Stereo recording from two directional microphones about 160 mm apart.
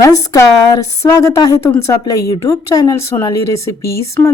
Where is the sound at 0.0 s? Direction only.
20° left (ahead or behind).